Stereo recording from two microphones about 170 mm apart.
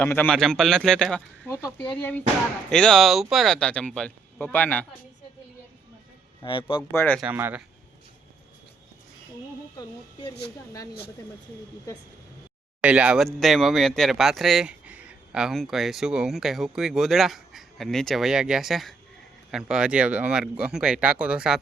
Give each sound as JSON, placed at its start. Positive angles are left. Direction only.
{"t": 0.0, "sound": "speech", "side_deg": 10}
{"t": 6.4, "sound": "a man's voice", "side_deg": 30}
{"t": 6.9, "sound": "speech", "side_deg": 10}
{"t": 7.2, "sound": "speech", "side_deg": -10}
{"t": 12.8, "sound": "speech", "side_deg": -5}